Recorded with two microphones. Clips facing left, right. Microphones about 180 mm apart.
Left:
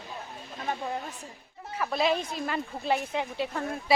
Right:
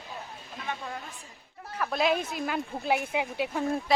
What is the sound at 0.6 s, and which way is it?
Speech, 40° left (ahead or behind).